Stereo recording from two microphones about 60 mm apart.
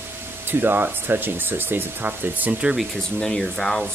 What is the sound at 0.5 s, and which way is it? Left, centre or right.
Speech, right.